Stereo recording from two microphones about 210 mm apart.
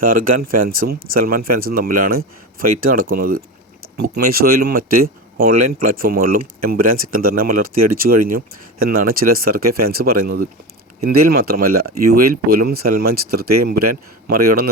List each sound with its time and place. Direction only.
0.0 s speech: 40° right (ahead or behind)